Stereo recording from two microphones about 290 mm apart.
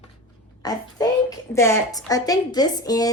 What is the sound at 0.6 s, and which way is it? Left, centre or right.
A child's voice, centre.